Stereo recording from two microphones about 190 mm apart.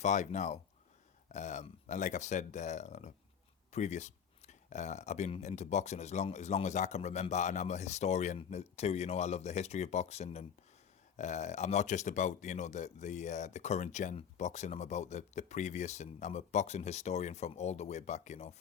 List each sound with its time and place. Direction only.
0.0 s a man's voice: 40° left (ahead or behind)